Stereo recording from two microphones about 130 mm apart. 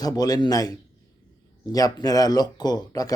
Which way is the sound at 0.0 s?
30° left (ahead or behind).